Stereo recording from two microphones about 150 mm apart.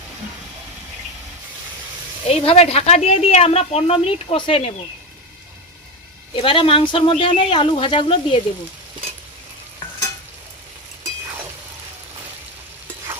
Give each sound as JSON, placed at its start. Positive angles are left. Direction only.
{"t": 2.2, "sound": "speech", "side_deg": 40}
{"t": 6.3, "sound": "speech", "side_deg": 35}